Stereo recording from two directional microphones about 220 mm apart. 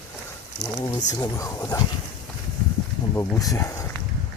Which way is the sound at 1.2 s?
15° left (ahead or behind).